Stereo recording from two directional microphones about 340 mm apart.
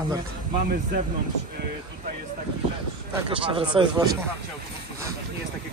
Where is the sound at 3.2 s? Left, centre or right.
Centre.